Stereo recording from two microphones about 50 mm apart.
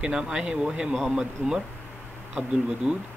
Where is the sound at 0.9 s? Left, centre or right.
Centre.